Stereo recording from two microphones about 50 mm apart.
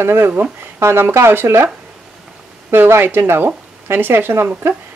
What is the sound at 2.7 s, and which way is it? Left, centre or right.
Speech, right.